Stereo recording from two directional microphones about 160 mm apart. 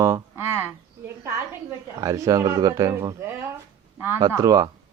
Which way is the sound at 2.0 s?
20° right (ahead or behind).